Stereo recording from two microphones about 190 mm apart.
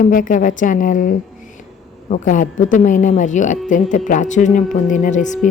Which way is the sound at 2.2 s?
40° left (ahead or behind).